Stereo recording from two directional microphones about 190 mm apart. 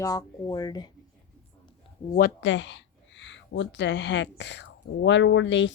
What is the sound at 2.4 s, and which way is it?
Speech, 75° left (ahead or behind).